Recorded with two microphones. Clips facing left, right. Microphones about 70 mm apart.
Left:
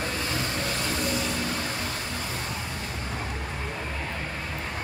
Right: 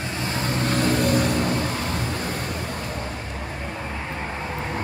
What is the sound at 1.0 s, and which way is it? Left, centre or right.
Vehicle, right.